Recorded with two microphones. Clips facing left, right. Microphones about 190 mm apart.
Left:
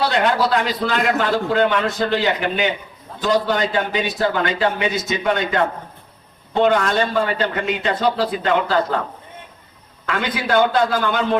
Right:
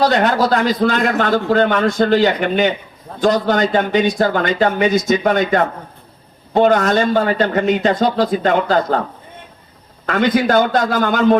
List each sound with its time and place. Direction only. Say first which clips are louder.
0.0 s a man's voice: right 4 dB; 40° right (ahead or behind)
10.1 s a man's voice: right 7 dB; 40° right (ahead or behind)